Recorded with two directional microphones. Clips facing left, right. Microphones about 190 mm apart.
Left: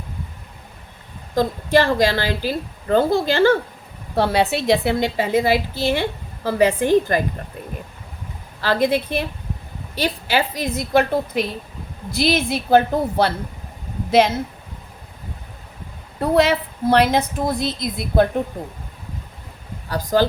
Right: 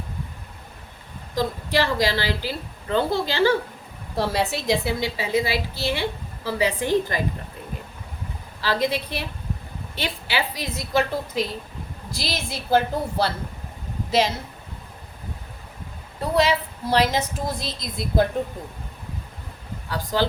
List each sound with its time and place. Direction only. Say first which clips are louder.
1.4 s a woman's voice: left 6 dB; 50° left (ahead or behind)
4.1 s a woman's voice: left 5 dB; 65° left (ahead or behind)
8.6 s a woman's voice: left 5 dB; 50° left (ahead or behind)
16.2 s a woman's voice: left 4 dB; 55° left (ahead or behind)
19.9 s a woman's voice: left 6 dB; 45° left (ahead or behind)